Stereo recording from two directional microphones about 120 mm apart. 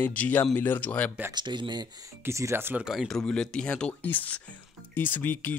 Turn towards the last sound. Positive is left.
turn(degrees=15)  # may be behind; listen again after turning